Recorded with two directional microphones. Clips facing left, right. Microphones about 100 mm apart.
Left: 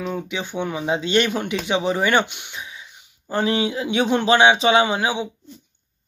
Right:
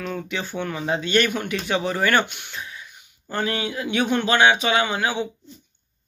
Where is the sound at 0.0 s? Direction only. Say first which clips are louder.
Left 2 dB; 15° left (ahead or behind).